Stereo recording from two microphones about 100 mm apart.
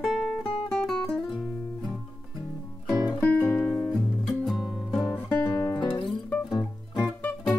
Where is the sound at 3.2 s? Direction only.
15° left (ahead or behind).